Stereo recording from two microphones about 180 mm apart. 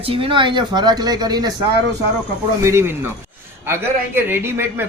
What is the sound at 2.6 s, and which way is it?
A man's voice, 15° right (ahead or behind).